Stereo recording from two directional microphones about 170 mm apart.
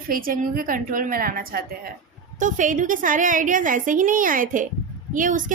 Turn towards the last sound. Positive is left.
turn(degrees=-50)  # may be behind; listen again after turning